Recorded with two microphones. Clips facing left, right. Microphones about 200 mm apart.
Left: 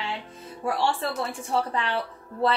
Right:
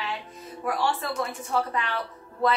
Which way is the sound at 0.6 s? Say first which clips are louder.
Left 1 dB; 30° left (ahead or behind).